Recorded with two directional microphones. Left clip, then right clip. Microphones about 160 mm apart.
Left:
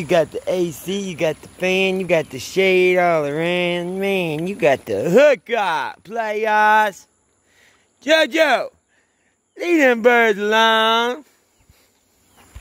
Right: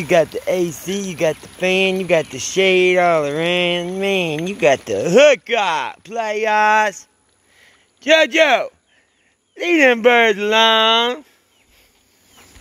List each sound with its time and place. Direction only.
0.0 s speech: centre (ahead or behind)
7.5 s a sound: 5° left (ahead or behind)
9.6 s speech: 15° left (ahead or behind)